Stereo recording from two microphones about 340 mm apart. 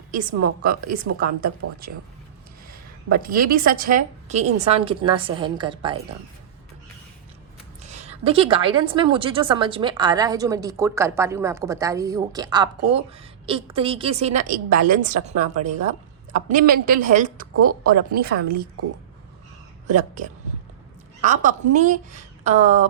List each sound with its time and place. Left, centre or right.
0.1 s a woman's voice: right
3.1 s a woman's voice: right
7.8 s a woman's voice: centre
19.9 s a woman's voice: right